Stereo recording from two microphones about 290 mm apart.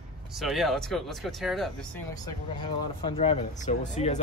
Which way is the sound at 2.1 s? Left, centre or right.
Centre.